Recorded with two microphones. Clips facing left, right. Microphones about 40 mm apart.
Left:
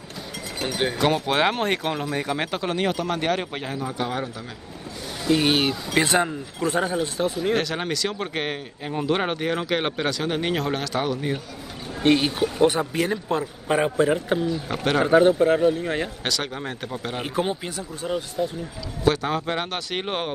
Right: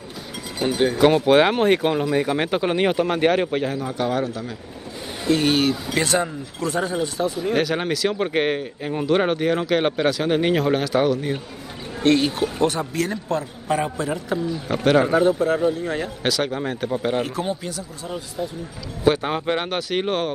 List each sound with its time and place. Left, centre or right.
0.9 s speech: centre
3.5 s a man's voice: centre; by 7.0 s left
7.0 s speech: left
7.5 s speech: centre
11.1 s speech: centre
12.0 s speech: centre
12.3 s speech: centre
12.6 s a man's voice: centre
14.7 s speech: centre
15.2 s a man's voice: left
16.2 s speech: centre
17.6 s speech: left
19.0 s speech: centre
19.9 s speech: centre